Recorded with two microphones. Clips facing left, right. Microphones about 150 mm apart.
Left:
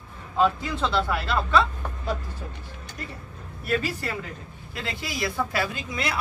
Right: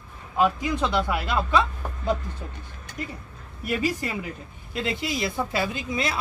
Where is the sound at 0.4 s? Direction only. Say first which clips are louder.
Right 1 dB; 15° right (ahead or behind).